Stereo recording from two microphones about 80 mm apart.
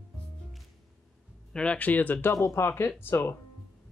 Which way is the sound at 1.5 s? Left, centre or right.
Centre.